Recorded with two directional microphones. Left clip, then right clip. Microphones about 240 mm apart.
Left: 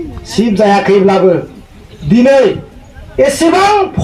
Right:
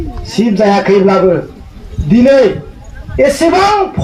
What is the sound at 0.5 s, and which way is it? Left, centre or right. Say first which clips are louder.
A man's voice: left 1 dB; left.